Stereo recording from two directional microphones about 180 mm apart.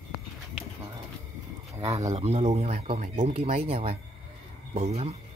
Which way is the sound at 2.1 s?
35° right (ahead or behind).